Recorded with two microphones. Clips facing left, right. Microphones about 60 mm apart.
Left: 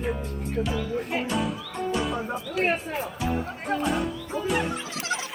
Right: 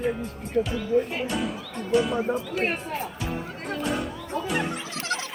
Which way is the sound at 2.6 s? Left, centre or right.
Centre.